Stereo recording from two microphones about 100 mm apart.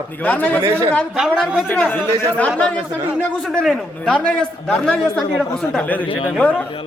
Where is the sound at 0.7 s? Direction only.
25° right (ahead or behind).